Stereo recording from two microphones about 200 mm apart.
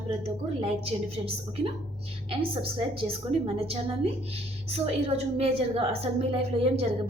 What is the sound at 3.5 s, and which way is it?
A woman's voice, 30° right (ahead or behind).